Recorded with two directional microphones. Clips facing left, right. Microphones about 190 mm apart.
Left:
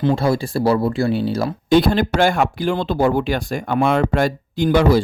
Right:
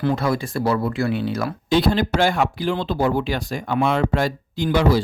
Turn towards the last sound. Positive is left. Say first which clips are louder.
# left 4 dB
turn(degrees=50)  # may be behind; listen again after turning